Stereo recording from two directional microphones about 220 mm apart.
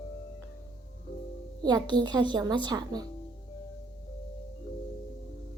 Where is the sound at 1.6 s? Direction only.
20° right (ahead or behind).